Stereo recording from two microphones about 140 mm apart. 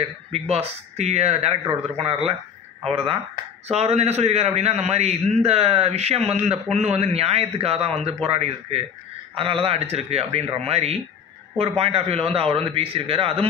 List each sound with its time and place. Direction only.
0.3 s a man's voice: 45° right (ahead or behind)